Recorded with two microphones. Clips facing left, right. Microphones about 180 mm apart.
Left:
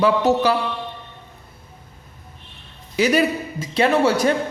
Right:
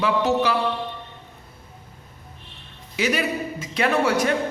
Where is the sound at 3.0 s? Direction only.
35° left (ahead or behind).